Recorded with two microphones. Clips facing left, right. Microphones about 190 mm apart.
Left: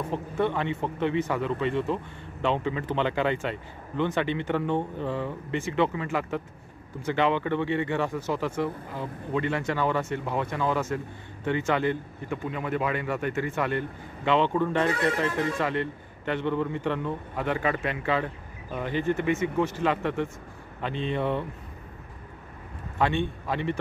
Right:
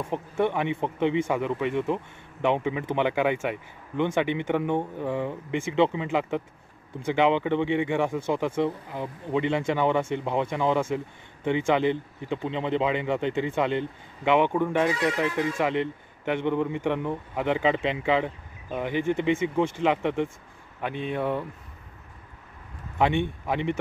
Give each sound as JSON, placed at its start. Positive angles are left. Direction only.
{"t": 0.1, "sound": "a man's voice", "side_deg": -15}
{"t": 14.9, "sound": "speech", "side_deg": 55}
{"t": 15.1, "sound": "a man's voice", "side_deg": -15}
{"t": 22.9, "sound": "a man's voice", "side_deg": -15}